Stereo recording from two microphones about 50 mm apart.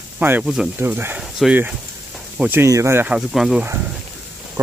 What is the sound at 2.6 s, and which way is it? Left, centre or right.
Speech, right.